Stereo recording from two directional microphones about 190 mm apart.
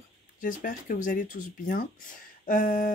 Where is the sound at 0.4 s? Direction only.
45° left (ahead or behind).